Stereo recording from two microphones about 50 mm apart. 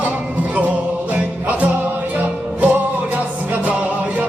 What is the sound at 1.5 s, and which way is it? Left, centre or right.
Music, right.